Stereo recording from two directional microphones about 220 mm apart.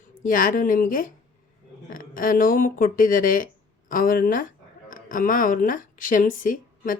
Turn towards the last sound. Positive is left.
turn(degrees=40)  # may be behind; listen again after turning